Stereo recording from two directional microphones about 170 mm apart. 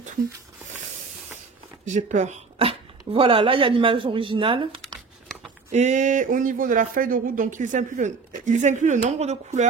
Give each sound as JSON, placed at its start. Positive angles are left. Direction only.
{"t": 1.9, "sound": "speech", "side_deg": -45}
{"t": 5.7, "sound": "speech", "side_deg": -45}